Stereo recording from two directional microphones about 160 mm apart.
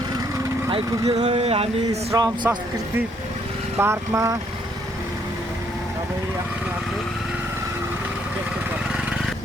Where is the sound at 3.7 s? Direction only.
15° right (ahead or behind).